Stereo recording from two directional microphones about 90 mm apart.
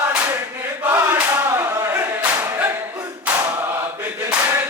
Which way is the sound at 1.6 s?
35° right (ahead or behind).